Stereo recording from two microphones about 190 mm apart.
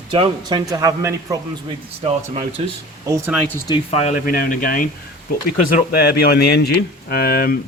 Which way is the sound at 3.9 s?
40° left (ahead or behind).